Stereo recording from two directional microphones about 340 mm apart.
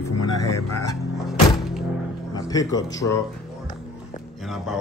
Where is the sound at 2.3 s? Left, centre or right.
Centre.